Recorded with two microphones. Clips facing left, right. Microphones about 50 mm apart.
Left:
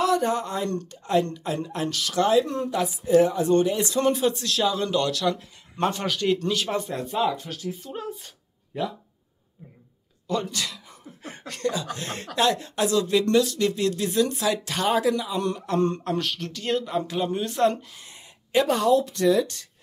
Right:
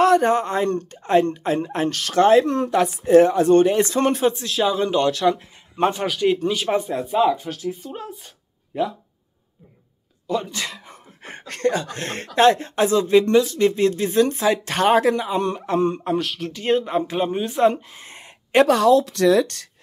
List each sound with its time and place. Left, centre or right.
0.0 s a woman's voice: right
4.3 s speech: right
10.2 s speech: centre
10.5 s speech: right
14.7 s speech: right
15.8 s speech: centre
16.5 s speech: right
17.9 s a sound: right
18.7 s speech: right
19.4 s speech: right